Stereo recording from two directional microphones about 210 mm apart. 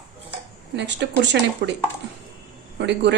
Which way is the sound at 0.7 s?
55° right (ahead or behind).